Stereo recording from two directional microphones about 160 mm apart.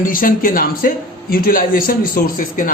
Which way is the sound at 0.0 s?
60° left (ahead or behind).